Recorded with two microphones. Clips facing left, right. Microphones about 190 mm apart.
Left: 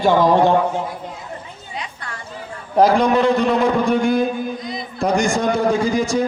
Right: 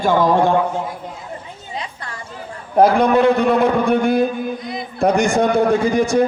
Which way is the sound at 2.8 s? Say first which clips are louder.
Right 2 dB; 55° right (ahead or behind).